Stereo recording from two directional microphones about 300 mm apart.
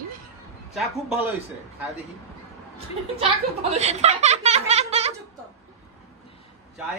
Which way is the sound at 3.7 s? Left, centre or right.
Right.